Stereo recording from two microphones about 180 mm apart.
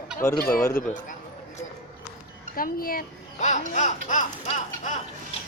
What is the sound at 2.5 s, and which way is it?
A child's voice, 55° left (ahead or behind).